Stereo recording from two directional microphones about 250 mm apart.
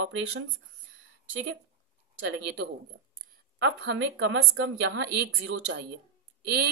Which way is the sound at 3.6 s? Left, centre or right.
Right.